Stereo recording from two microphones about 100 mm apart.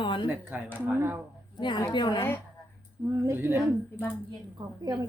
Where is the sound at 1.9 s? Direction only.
50° left (ahead or behind).